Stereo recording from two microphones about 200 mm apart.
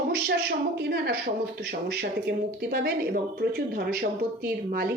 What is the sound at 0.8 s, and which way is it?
Speech, 55° right (ahead or behind).